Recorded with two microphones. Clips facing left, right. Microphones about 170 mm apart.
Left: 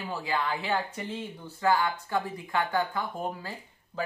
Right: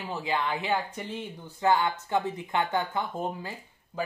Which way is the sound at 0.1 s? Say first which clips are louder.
Right 1 dB; 20° right (ahead or behind).